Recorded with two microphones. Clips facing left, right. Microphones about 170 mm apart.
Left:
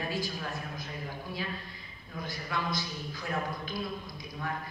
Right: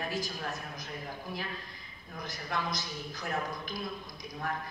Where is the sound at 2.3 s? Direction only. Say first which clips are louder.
Left 1 dB; 40° right (ahead or behind).